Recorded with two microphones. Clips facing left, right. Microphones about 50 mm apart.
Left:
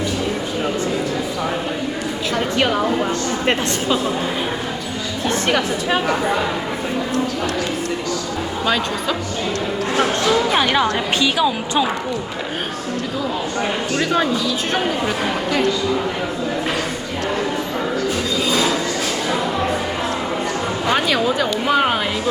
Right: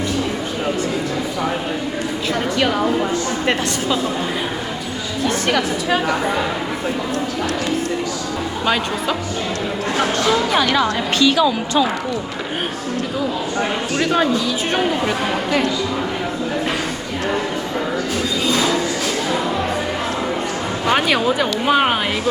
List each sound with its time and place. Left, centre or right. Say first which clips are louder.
8.6 s speech: right 1 dB; centre
10.6 s a woman's voice: even; left
13.9 s speech: right 1 dB; centre
20.9 s speech: right 2 dB; centre